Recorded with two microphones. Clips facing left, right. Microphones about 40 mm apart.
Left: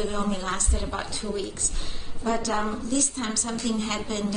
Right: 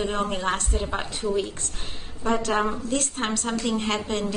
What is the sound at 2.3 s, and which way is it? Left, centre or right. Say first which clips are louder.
A woman's voice: right 3 dB; right.